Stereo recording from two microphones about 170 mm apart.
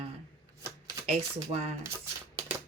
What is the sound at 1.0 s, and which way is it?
Speech, 40° right (ahead or behind).